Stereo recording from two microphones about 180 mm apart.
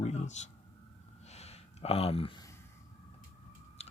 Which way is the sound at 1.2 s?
35° left (ahead or behind).